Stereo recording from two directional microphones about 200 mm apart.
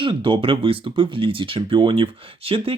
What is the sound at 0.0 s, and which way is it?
Speech, 25° right (ahead or behind).